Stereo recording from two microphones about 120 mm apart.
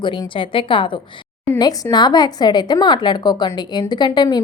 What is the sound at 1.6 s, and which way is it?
A woman's voice, 35° left (ahead or behind).